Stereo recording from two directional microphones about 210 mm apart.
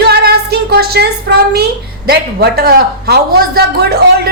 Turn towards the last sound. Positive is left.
turn(degrees=-50)  # may be behind; listen again after turning